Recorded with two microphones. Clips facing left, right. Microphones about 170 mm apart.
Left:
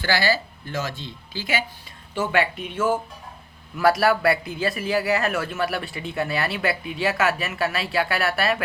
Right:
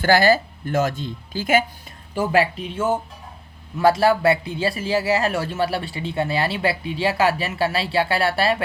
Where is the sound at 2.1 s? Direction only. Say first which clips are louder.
Right 3 dB; 35° right (ahead or behind).